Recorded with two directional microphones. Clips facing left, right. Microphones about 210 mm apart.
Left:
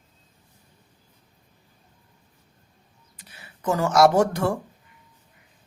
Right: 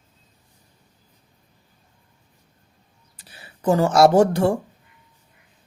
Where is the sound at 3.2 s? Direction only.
35° right (ahead or behind).